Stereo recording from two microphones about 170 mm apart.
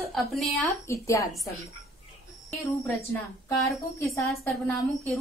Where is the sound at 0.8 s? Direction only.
15° left (ahead or behind).